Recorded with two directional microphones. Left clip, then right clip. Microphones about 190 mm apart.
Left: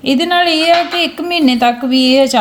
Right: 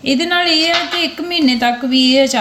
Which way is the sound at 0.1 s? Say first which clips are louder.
Left 2 dB; 35° left (ahead or behind).